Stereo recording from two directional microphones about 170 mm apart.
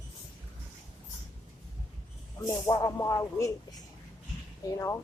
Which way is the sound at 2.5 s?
25° left (ahead or behind).